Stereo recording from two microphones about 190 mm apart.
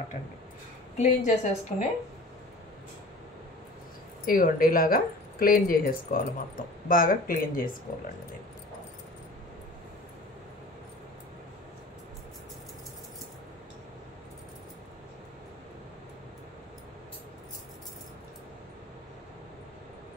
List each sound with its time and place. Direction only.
0.9 s a woman's voice: 40° left (ahead or behind)
4.3 s a woman's voice: 50° left (ahead or behind)